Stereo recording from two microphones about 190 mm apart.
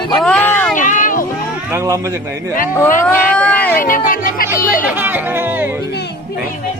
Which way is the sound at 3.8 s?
45° left (ahead or behind).